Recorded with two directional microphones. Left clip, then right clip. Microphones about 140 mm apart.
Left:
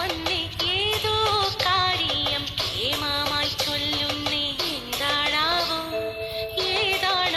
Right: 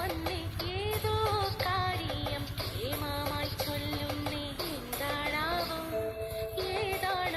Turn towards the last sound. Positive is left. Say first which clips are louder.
# left 9 dB
turn(degrees=20)  # may be behind; listen again after turning